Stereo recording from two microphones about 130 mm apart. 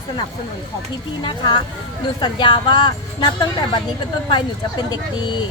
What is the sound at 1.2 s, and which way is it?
Speech, 35° left (ahead or behind).